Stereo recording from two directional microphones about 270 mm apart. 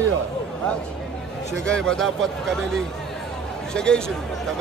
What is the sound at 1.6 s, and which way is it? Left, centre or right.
Speech, centre.